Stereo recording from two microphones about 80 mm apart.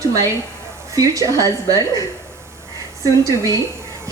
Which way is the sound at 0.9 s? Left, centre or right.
Right.